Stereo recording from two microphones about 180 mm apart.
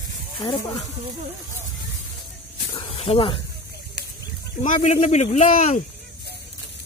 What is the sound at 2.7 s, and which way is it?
Snake, 30° left (ahead or behind).